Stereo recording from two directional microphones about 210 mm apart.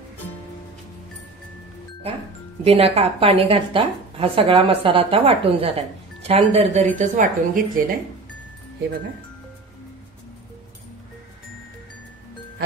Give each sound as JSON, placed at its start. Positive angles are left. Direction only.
{"t": 2.6, "sound": "a woman's voice", "side_deg": -30}